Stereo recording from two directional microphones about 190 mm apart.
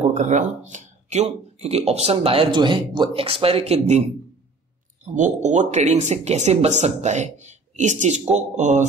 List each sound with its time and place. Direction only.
0.1 s speech: 40° right (ahead or behind)
5.0 s speech: 40° right (ahead or behind)